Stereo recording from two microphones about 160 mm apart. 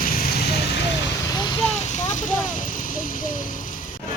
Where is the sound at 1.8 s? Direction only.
50° left (ahead or behind).